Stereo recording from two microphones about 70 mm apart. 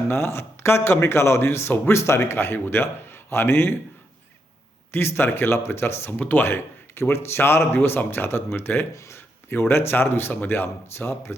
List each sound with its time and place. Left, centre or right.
0.1 s a man's voice: left
4.9 s a man's voice: left